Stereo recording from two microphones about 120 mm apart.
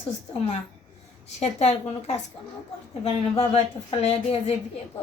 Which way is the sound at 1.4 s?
65° left (ahead or behind).